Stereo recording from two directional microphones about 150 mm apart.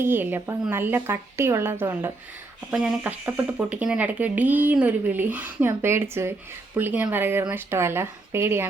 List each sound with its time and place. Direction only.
0.0 s speech: 15° right (ahead or behind)
2.6 s speech: centre (ahead or behind)
3.0 s speech: 15° right (ahead or behind)